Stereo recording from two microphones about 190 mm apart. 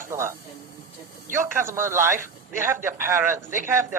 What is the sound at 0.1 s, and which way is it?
Speech, 15° right (ahead or behind).